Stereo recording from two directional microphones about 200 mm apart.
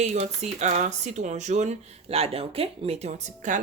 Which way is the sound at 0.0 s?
35° right (ahead or behind).